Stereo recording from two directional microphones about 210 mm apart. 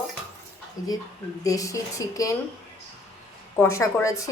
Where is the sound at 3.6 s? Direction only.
15° left (ahead or behind).